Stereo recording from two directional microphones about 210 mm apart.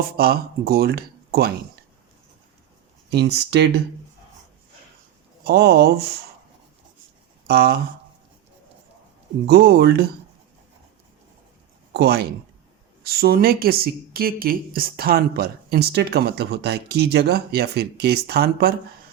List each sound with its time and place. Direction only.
0.2 s speech: 45° right (ahead or behind)
3.1 s speech: 55° right (ahead or behind)
5.5 s speech: 50° right (ahead or behind)
7.4 s speech: 50° right (ahead or behind)
9.5 s speech: 50° right (ahead or behind)
11.9 s speech: 50° right (ahead or behind)